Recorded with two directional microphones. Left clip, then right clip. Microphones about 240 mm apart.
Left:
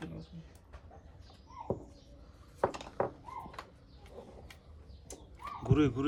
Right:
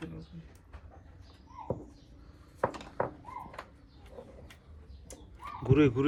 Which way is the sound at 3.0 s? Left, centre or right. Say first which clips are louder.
Right 1 dB; left.